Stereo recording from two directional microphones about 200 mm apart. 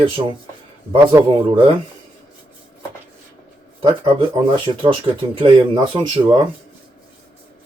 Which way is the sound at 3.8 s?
20° right (ahead or behind).